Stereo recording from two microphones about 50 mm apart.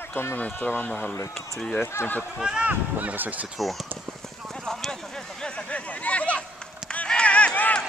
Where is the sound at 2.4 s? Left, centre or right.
Centre.